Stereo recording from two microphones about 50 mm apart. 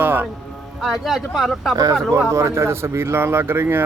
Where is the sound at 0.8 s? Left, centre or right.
Centre.